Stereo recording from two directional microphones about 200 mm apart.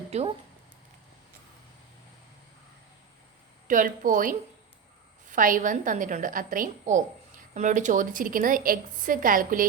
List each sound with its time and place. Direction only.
0.1 s speech: 30° right (ahead or behind)
3.7 s a woman's voice: 40° right (ahead or behind)